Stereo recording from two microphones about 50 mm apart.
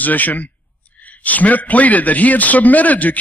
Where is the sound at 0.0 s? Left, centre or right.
Left.